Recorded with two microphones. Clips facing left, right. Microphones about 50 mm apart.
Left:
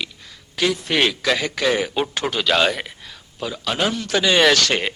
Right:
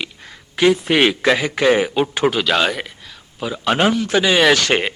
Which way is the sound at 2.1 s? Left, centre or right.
Centre.